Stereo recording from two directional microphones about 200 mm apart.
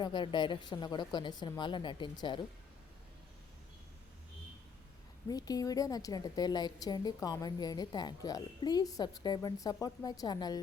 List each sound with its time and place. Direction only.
0.0 s a woman's voice: 25° left (ahead or behind)
5.3 s a woman's voice: 20° left (ahead or behind)